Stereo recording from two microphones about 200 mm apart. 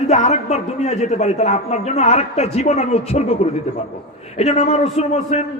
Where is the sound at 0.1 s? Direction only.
35° left (ahead or behind).